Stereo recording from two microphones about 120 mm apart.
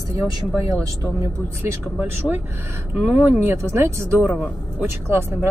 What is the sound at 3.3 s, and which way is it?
Speech, 15° right (ahead or behind).